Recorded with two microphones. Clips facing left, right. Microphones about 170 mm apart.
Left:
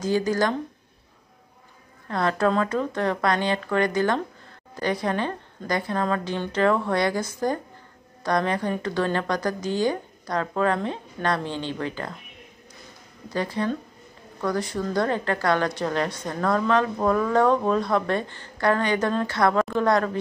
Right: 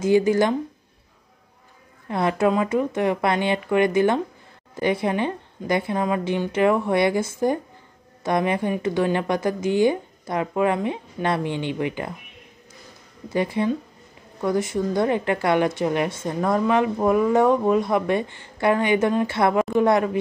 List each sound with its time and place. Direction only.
0.0 s a woman's voice: 25° right (ahead or behind)
2.0 s a woman's voice: 15° right (ahead or behind)
13.3 s a woman's voice: 20° right (ahead or behind)